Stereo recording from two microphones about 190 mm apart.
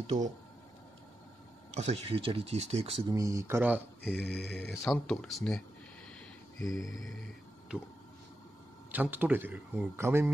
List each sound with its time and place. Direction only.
0.0 s speech: 35° right (ahead or behind)
1.7 s speech: 35° right (ahead or behind)
3.2 s speech: 15° right (ahead or behind)
4.0 s speech: 10° left (ahead or behind)
7.7 s speech: 5° right (ahead or behind)
8.9 s speech: 10° right (ahead or behind)